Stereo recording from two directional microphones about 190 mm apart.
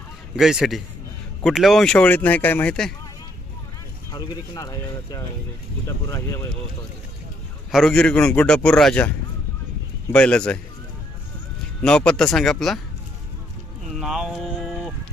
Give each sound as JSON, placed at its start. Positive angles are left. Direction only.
{"t": 0.3, "sound": "a man's voice", "side_deg": 0}
{"t": 4.1, "sound": "speech", "side_deg": 20}
{"t": 7.7, "sound": "a man's voice", "side_deg": 0}
{"t": 11.8, "sound": "a man's voice", "side_deg": 5}
{"t": 13.8, "sound": "a sound", "side_deg": 0}